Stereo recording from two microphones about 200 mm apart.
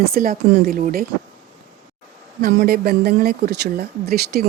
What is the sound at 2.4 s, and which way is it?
Speech, 50° right (ahead or behind).